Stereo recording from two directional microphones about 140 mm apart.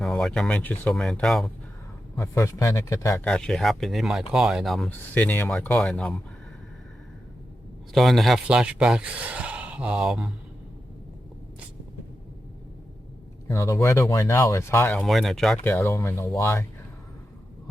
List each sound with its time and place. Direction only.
0.0 s speech: centre (ahead or behind)
2.1 s speech: 20° left (ahead or behind)
3.2 s speech: 5° left (ahead or behind)
4.9 s speech: 10° left (ahead or behind)
7.9 s speech: centre (ahead or behind)
13.5 s speech: 20° left (ahead or behind)
14.9 s speech: centre (ahead or behind)
15.6 s speech: 20° left (ahead or behind)